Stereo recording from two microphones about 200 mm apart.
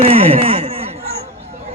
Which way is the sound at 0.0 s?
30° right (ahead or behind).